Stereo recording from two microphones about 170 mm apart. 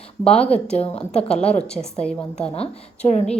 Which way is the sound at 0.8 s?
35° left (ahead or behind).